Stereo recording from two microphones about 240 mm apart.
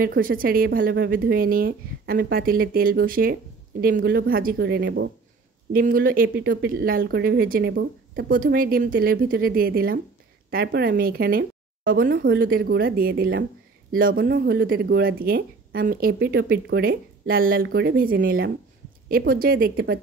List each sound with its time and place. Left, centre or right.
0.0 s speech: right